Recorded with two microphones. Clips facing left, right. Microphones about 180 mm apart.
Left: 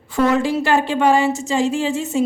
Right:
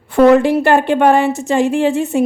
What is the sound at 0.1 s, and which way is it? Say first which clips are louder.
A woman's voice: right 8 dB; 60° right (ahead or behind).